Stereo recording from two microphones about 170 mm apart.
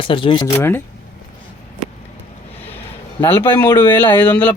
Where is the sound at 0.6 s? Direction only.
15° left (ahead or behind).